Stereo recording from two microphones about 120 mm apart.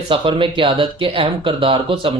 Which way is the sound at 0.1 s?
45° right (ahead or behind).